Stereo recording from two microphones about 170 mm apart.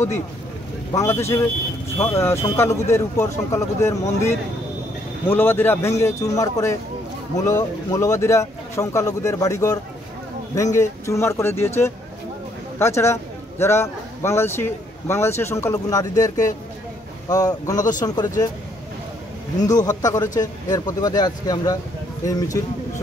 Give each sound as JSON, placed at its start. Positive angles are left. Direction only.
{"t": 0.9, "sound": "speech", "side_deg": 15}
{"t": 5.3, "sound": "speech", "side_deg": 10}
{"t": 12.7, "sound": "a man's voice", "side_deg": 15}
{"t": 19.6, "sound": "speech", "side_deg": 20}